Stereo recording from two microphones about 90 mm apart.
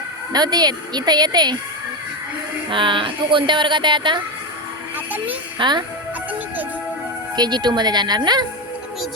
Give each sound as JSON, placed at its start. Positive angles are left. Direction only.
{"t": 0.3, "sound": "speech", "side_deg": -50}
{"t": 2.6, "sound": "speech", "side_deg": -65}
{"t": 5.1, "sound": "a child's voice", "side_deg": -15}
{"t": 5.5, "sound": "speech", "side_deg": -55}
{"t": 7.3, "sound": "speech", "side_deg": -50}